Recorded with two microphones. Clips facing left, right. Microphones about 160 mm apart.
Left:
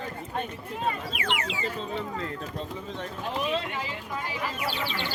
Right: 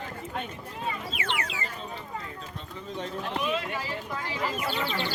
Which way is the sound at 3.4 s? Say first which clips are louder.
Left 2 dB; 30° left (ahead or behind).